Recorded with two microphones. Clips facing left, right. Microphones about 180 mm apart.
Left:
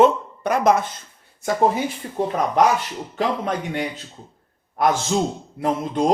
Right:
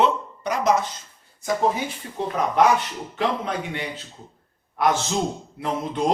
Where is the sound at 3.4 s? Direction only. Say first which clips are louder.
Left 4 dB; 45° left (ahead or behind).